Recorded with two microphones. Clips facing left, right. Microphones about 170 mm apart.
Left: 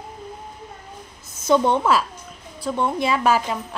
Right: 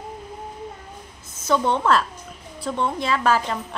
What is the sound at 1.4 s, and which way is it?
A woman's voice, 15° left (ahead or behind).